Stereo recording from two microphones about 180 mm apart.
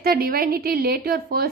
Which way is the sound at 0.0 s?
55° right (ahead or behind).